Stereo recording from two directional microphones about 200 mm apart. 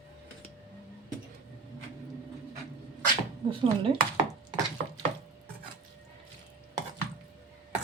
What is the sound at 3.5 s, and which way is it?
Speech, 25° right (ahead or behind).